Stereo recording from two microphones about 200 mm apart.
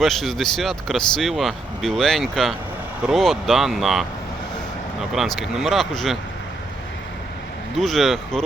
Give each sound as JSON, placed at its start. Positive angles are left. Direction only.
{"t": 0.0, "sound": "speech", "side_deg": 0}
{"t": 7.8, "sound": "speech", "side_deg": 0}